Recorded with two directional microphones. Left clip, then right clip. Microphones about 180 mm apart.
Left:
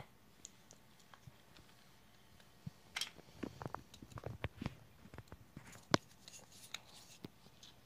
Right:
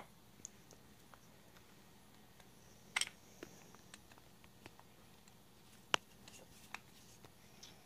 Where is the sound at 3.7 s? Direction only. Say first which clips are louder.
Left 14 dB; 60° left (ahead or behind).